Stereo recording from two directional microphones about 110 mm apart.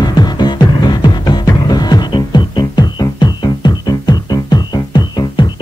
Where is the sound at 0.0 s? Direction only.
40° left (ahead or behind).